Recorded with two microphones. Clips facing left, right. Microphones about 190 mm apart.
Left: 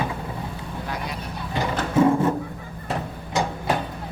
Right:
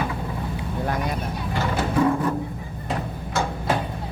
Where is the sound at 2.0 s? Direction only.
25° left (ahead or behind).